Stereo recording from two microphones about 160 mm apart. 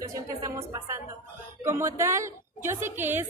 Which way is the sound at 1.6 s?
15° right (ahead or behind).